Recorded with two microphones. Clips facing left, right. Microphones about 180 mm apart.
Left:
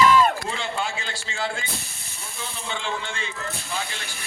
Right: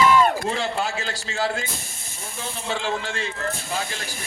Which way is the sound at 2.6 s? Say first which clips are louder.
Right 4 dB; 40° right (ahead or behind).